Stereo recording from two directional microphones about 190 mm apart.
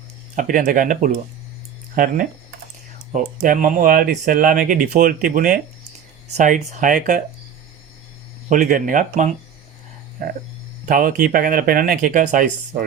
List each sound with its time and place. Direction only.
0.3 s speech: 45° right (ahead or behind)
8.4 s speech: 45° right (ahead or behind)
10.8 s speech: 45° right (ahead or behind)